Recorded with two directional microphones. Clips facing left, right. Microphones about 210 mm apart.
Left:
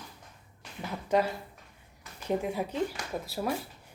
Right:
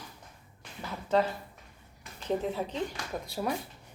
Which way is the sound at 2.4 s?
10° left (ahead or behind).